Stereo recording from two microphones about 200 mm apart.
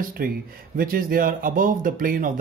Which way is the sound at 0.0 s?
45° right (ahead or behind).